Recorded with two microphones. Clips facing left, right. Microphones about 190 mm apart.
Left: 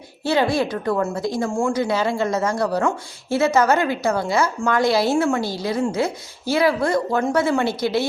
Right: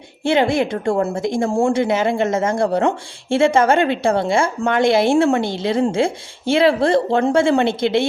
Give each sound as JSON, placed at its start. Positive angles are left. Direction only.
{"t": 0.3, "sound": "a woman's voice", "side_deg": -25}
{"t": 1.8, "sound": "a woman's voice", "side_deg": -20}